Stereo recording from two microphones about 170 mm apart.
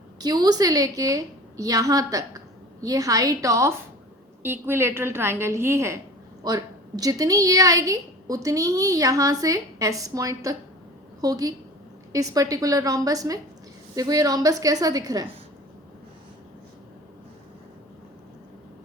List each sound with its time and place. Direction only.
0.2 s a woman's voice: 25° right (ahead or behind)